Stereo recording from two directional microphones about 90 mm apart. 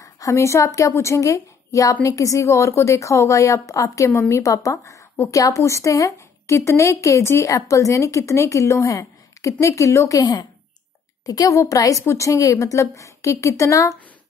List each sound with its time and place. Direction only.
0.0 s a woman's voice: 35° left (ahead or behind)